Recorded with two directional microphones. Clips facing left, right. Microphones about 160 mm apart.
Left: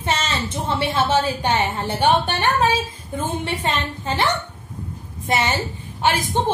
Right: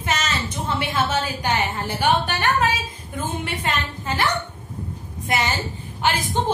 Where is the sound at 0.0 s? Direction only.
30° left (ahead or behind).